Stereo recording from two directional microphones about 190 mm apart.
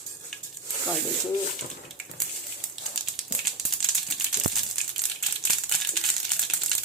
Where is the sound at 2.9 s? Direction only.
Centre (ahead or behind).